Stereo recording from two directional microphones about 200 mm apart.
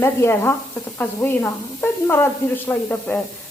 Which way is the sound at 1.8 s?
10° left (ahead or behind).